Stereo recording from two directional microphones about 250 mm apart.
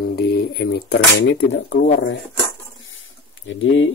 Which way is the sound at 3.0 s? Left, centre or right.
Left.